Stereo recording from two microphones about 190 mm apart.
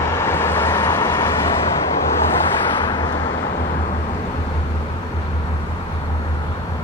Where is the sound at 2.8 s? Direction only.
25° left (ahead or behind).